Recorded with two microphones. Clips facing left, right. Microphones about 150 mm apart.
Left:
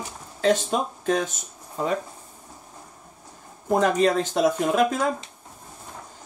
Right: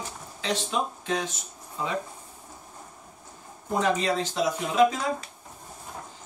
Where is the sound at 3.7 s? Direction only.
50° left (ahead or behind).